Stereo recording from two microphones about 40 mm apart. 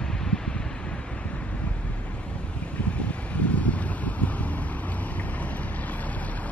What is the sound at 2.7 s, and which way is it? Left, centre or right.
Wind, left.